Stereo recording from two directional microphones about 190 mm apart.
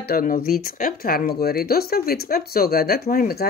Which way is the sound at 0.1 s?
50° left (ahead or behind).